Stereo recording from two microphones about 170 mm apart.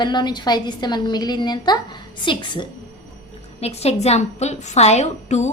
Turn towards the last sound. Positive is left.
turn(degrees=40)  # may be behind; listen again after turning